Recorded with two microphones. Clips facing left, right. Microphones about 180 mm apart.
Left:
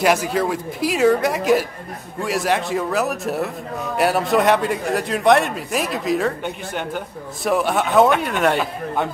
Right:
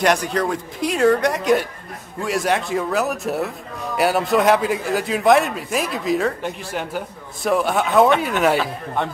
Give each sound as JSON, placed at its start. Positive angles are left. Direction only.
{"t": 0.0, "sound": "a man's voice", "side_deg": 5}